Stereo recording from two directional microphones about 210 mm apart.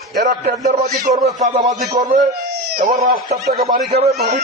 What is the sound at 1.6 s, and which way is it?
Speech, 15° right (ahead or behind).